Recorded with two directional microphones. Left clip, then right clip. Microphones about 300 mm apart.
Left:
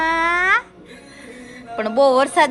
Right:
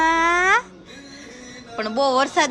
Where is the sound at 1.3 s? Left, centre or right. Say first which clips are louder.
Left 5 dB; centre.